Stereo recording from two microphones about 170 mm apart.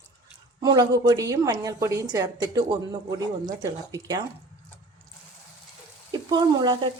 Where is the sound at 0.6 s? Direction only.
20° right (ahead or behind).